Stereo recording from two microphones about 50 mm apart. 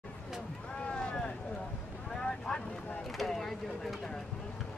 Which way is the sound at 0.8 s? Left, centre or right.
Centre.